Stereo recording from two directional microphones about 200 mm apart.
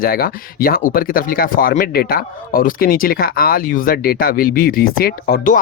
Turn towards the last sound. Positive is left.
turn(degrees=45)  # may be behind; listen again after turning